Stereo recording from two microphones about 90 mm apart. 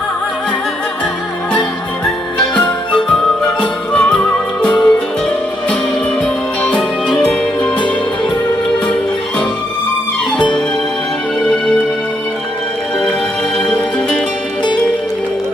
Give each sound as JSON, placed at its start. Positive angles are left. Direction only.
{"t": 3.6, "sound": "music", "side_deg": 15}
{"t": 6.2, "sound": "music", "side_deg": 10}
{"t": 11.4, "sound": "music", "side_deg": 0}